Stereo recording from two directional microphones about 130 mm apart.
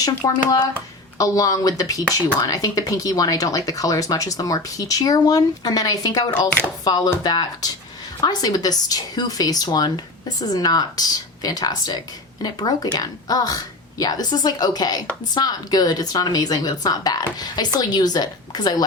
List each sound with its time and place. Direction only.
0.0 s a woman's voice: 30° left (ahead or behind)